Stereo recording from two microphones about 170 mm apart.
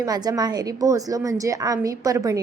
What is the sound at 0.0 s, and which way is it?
A woman's voice, 20° right (ahead or behind).